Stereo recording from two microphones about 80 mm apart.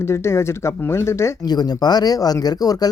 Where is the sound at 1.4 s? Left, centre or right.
Left.